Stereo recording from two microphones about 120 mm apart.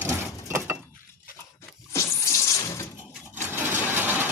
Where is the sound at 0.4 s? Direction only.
20° right (ahead or behind).